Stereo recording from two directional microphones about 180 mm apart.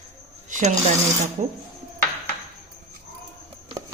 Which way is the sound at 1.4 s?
35° right (ahead or behind).